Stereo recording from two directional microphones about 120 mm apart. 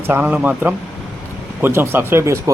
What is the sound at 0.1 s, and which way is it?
A man's voice, 10° right (ahead or behind).